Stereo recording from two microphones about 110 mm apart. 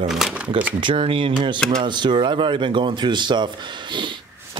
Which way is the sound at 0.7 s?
50° right (ahead or behind).